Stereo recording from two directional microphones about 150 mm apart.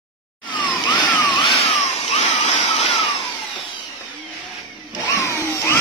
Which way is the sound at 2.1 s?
40° left (ahead or behind).